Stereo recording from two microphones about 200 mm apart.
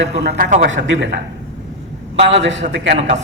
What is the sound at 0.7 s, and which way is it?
Speech, 65° right (ahead or behind).